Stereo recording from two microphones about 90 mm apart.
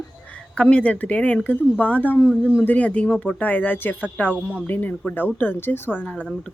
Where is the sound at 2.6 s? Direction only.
15° left (ahead or behind).